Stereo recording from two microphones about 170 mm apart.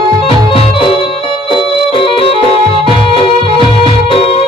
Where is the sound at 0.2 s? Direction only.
35° left (ahead or behind).